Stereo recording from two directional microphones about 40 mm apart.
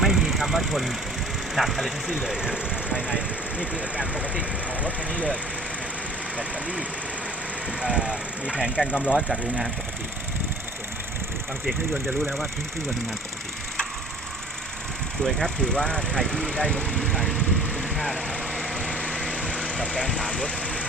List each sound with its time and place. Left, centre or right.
0.0 s vehicle: centre
1.5 s speech: centre
2.0 s speech: centre; by 4.9 s right
6.3 s speech: right
9.0 s speech: left
15.2 s speech: centre
15.4 s speech: left
16.7 s speech: right
17.3 s vehicle: right
19.1 s lawn mower: right